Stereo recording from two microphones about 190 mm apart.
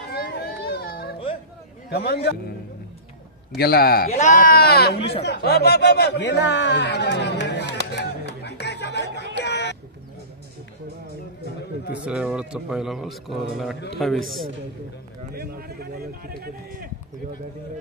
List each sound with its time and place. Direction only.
0.1 s a sound: 55° left (ahead or behind)
1.9 s a man's voice: 55° left (ahead or behind)
3.5 s speech: 55° left (ahead or behind)
4.1 s speech: 40° left (ahead or behind); by 7.7 s 65° left (ahead or behind)
7.9 s music: 65° left (ahead or behind)
9.3 s a sound: 65° left (ahead or behind)
12.0 s speech: 5° right (ahead or behind)
15.3 s a man's voice: 55° right (ahead or behind)